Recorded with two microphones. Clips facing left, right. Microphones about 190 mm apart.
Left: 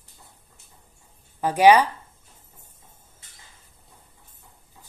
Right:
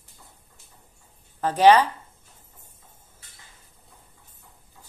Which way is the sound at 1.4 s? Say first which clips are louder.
Left 1 dB; 10° left (ahead or behind).